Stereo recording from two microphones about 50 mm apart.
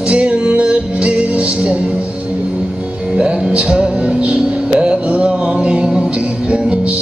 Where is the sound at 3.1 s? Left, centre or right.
Right.